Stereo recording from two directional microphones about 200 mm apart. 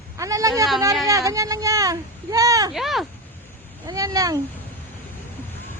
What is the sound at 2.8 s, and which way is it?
Speech, centre (ahead or behind).